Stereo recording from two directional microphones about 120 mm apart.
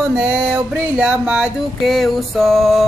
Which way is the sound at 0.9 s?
10° right (ahead or behind).